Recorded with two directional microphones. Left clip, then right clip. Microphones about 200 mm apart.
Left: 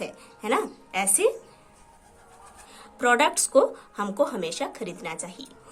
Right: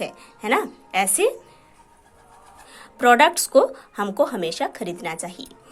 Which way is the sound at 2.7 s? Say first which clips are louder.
Right 6 dB; 25° right (ahead or behind).